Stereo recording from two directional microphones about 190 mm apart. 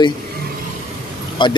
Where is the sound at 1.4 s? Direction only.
25° left (ahead or behind).